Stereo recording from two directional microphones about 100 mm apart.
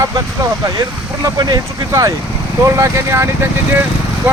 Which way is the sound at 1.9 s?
35° right (ahead or behind).